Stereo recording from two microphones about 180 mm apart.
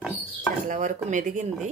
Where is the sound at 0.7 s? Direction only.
45° right (ahead or behind).